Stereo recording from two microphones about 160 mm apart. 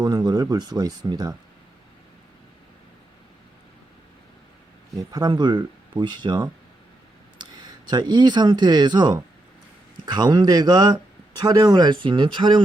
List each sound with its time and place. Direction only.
0.0 s speech: 25° right (ahead or behind)
4.9 s speech: 25° right (ahead or behind)